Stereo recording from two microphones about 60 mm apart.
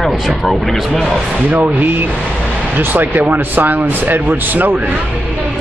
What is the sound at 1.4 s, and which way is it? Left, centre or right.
Speech, right.